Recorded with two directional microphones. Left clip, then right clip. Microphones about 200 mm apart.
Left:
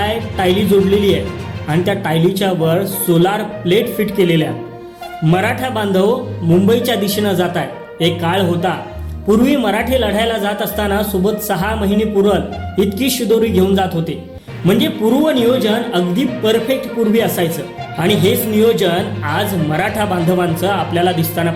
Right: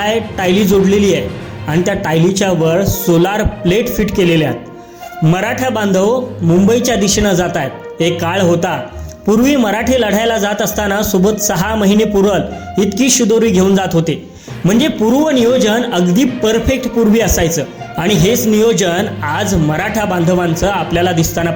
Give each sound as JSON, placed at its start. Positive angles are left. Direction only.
{"t": 0.0, "sound": "speech", "side_deg": -20}